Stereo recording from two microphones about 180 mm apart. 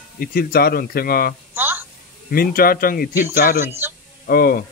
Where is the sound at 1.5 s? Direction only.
10° right (ahead or behind).